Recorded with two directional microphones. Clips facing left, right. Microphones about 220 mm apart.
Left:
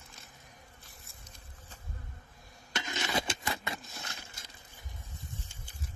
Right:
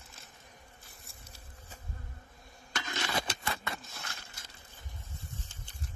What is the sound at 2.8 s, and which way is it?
Scrape, 20° left (ahead or behind).